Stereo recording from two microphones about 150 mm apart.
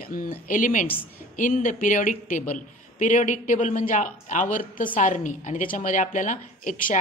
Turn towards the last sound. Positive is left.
turn(degrees=60)  # may be behind; listen again after turning